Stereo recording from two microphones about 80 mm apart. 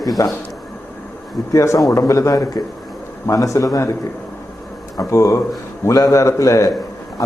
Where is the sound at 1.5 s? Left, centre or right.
Left.